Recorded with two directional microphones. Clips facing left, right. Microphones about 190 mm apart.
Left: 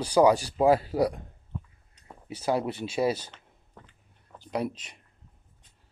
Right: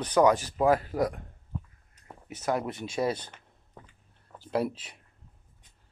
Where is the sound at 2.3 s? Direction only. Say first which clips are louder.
Left 2 dB; 30° left (ahead or behind).